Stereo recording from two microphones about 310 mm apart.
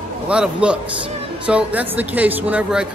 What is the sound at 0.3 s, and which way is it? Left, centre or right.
Speech, centre.